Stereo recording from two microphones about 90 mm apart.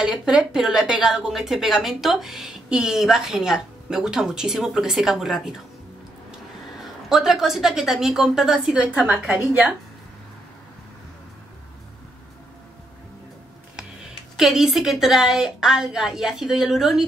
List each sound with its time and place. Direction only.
0.0 s a woman's voice: 5° right (ahead or behind)
6.8 s a woman's voice: 5° right (ahead or behind)
9.5 s speech: 20° right (ahead or behind)
14.3 s a woman's voice: 5° right (ahead or behind)